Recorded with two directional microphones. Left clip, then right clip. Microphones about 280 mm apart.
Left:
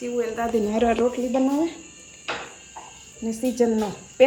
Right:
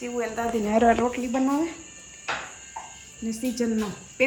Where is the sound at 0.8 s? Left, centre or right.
Right.